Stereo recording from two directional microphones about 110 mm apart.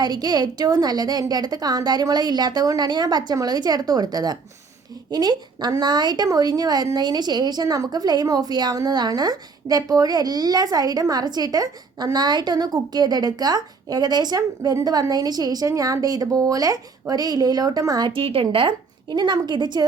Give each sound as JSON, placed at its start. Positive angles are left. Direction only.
{"t": 0.0, "sound": "a woman's voice", "side_deg": -40}
{"t": 18.1, "sound": "a woman's voice", "side_deg": -55}